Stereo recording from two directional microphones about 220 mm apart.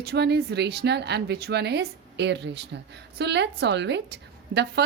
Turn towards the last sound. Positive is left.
turn(degrees=-50)  # may be behind; listen again after turning